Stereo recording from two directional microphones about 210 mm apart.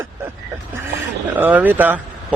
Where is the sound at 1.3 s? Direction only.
10° right (ahead or behind).